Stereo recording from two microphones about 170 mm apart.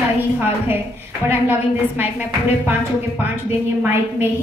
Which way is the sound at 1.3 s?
10° right (ahead or behind).